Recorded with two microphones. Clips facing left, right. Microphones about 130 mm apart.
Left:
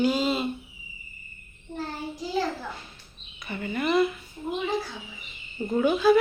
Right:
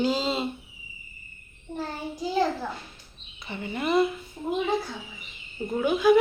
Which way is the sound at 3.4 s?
25° right (ahead or behind).